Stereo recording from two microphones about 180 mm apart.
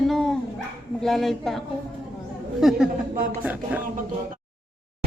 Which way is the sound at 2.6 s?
Centre (ahead or behind).